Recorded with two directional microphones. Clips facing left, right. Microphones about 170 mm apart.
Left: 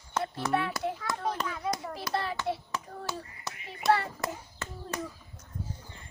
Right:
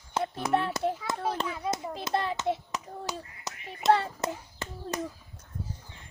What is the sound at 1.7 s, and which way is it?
Finger snapping, 20° right (ahead or behind).